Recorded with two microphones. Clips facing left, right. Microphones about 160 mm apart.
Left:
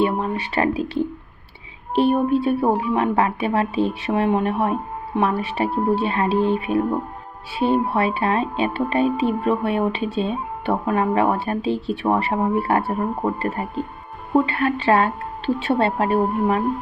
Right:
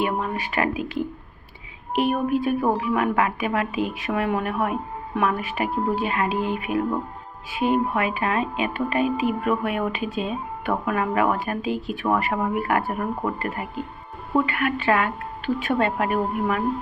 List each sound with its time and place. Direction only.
0.0 s speech: 30° left (ahead or behind)